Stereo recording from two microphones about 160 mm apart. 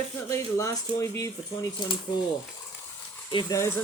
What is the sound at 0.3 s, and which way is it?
Speech, 20° left (ahead or behind).